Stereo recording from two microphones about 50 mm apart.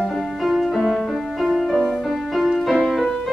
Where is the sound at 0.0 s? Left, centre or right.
Centre.